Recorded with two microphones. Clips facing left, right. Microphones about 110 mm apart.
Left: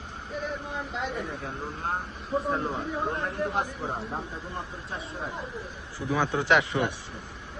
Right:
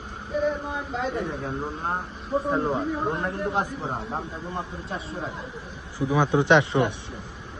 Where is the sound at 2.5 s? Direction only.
20° right (ahead or behind).